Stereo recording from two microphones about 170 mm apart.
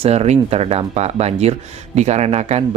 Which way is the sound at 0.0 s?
35° right (ahead or behind).